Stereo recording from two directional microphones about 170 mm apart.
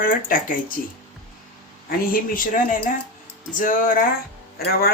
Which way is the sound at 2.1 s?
55° left (ahead or behind).